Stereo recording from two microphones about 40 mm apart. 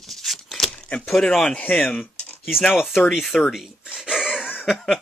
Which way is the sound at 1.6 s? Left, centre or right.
Left.